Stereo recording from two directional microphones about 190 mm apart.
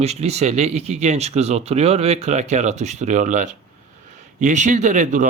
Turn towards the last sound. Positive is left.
turn(degrees=-40)  # may be behind; listen again after turning